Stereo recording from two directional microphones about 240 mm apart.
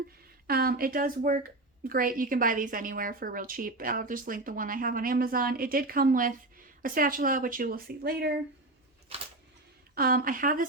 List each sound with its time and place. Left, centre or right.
0.4 s a woman's voice: right
9.9 s a woman's voice: right